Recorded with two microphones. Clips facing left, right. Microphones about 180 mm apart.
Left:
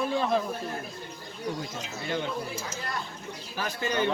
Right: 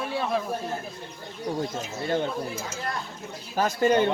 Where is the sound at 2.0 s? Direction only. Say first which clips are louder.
Right 5 dB; 45° right (ahead or behind).